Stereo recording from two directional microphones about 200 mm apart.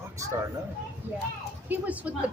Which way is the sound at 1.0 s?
10° right (ahead or behind).